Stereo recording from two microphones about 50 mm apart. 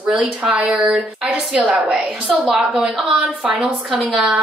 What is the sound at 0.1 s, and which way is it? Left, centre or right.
Speech, right.